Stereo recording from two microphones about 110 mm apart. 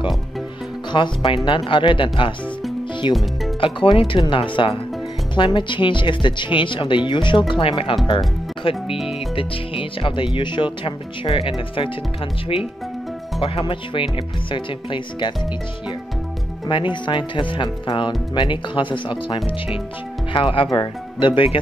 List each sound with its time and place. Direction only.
0.9 s speech: 45° left (ahead or behind)
8.8 s speech: 5° right (ahead or behind)
9.3 s speech: 55° left (ahead or behind)
13.4 s speech: 55° left (ahead or behind)
16.6 s speech: 45° left (ahead or behind)